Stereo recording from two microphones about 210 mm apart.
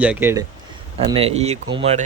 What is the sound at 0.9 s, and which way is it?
Speech, 25° right (ahead or behind).